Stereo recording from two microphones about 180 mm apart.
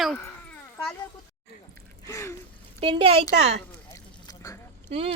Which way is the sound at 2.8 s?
30° right (ahead or behind).